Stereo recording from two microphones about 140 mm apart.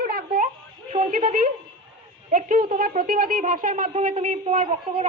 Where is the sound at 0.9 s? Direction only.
70° right (ahead or behind).